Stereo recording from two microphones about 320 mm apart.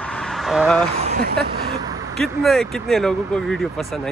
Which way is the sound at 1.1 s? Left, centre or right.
Right.